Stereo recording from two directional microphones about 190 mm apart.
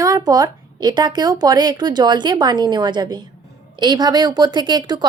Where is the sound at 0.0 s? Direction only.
20° right (ahead or behind).